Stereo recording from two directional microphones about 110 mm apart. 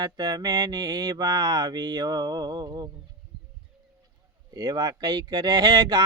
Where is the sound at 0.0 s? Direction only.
40° right (ahead or behind).